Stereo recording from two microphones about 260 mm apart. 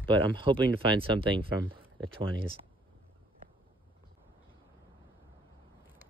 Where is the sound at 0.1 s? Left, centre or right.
Centre.